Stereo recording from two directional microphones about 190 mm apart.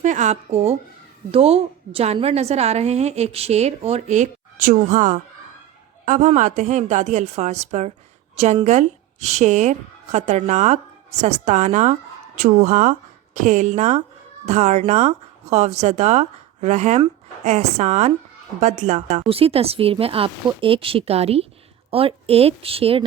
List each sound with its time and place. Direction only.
0.0 s a woman's voice: 40° right (ahead or behind)